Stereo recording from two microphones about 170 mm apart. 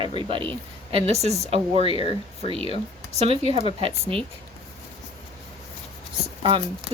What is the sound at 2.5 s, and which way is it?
Speech, 30° right (ahead or behind).